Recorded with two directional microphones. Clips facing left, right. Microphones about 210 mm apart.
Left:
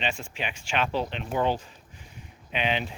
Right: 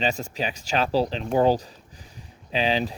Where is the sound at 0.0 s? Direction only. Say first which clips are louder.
Right 6 dB; 40° right (ahead or behind).